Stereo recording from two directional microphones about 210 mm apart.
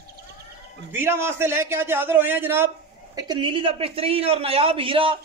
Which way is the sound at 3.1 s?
20° right (ahead or behind).